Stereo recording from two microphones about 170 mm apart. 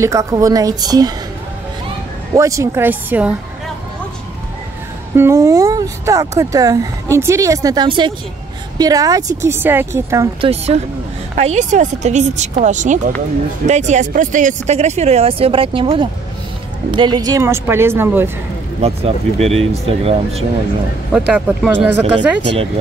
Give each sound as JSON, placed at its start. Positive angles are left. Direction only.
{"t": 0.0, "sound": "speech", "side_deg": -20}
{"t": 2.3, "sound": "speech", "side_deg": -20}
{"t": 5.1, "sound": "speech", "side_deg": -15}
{"t": 10.4, "sound": "speech", "side_deg": -35}
{"t": 18.8, "sound": "speech", "side_deg": -35}
{"t": 21.3, "sound": "speech", "side_deg": -10}